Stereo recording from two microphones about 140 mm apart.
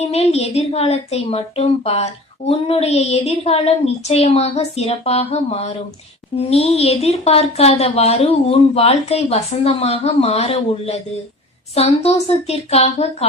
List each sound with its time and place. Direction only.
0.0 s a woman's voice: 50° left (ahead or behind)